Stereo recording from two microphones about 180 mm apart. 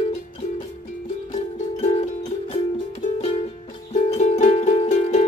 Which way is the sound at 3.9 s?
40° left (ahead or behind).